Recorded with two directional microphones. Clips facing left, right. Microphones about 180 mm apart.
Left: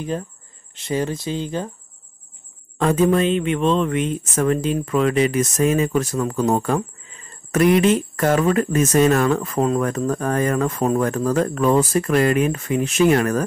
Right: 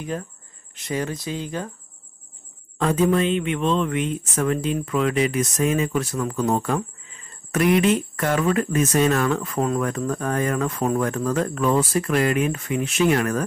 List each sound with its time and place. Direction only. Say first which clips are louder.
0.7 s speech: left 4 dB; 30° left (ahead or behind)
2.8 s speech: left 3 dB; 45° left (ahead or behind)